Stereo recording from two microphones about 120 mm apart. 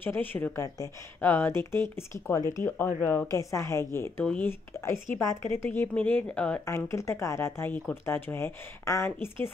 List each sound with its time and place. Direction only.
0.0 s speech: 15° left (ahead or behind)
6.6 s speech: 25° left (ahead or behind)